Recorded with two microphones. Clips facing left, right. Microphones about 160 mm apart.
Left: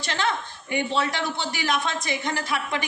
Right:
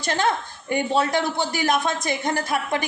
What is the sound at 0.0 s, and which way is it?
A woman's voice, 45° right (ahead or behind).